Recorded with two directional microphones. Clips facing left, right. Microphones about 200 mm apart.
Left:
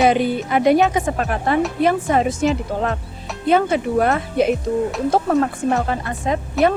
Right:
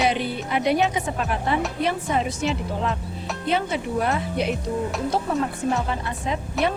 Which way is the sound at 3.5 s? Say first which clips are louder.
Left 8 dB; 50° left (ahead or behind).